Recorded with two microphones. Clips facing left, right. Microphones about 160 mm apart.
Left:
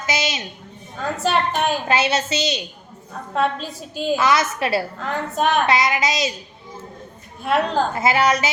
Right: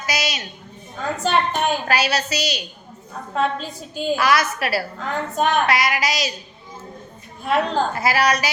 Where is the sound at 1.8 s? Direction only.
25° left (ahead or behind).